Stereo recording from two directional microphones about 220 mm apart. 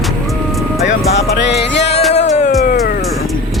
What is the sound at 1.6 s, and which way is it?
Music, 50° left (ahead or behind).